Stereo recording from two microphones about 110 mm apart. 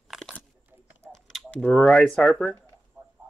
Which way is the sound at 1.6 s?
10° left (ahead or behind).